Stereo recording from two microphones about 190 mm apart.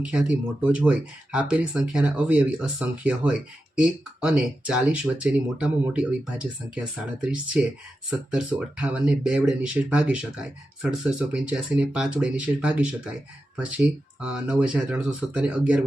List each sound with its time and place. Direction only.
0.0 s speech: 5° right (ahead or behind)